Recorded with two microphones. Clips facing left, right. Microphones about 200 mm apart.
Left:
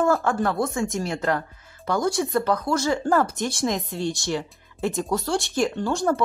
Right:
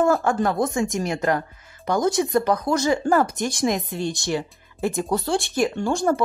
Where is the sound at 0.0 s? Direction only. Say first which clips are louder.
Right 2 dB; 10° right (ahead or behind).